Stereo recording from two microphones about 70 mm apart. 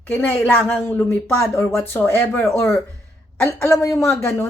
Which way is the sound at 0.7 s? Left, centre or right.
Left.